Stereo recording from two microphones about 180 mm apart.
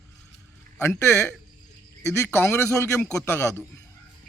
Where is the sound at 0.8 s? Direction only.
15° left (ahead or behind).